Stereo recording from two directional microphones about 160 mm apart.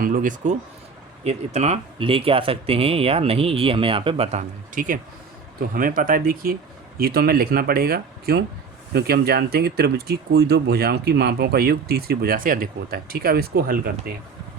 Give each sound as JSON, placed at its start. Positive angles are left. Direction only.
{"t": 0.0, "sound": "speech", "side_deg": -55}
{"t": 1.2, "sound": "speech", "side_deg": -40}